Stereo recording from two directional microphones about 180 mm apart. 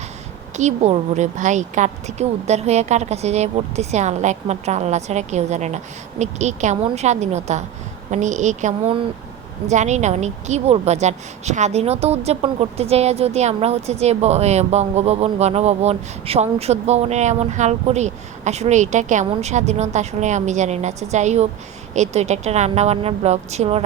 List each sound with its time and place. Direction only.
0.5 s a woman's voice: 40° right (ahead or behind)